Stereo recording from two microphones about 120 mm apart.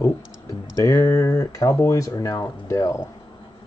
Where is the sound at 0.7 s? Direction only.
25° left (ahead or behind).